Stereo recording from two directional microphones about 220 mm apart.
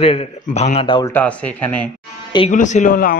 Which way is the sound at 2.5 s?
35° left (ahead or behind).